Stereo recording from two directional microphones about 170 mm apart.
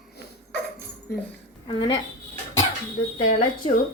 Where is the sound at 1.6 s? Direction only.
25° left (ahead or behind).